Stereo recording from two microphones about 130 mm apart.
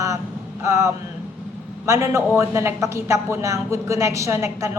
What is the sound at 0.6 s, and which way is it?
Speech, 20° right (ahead or behind).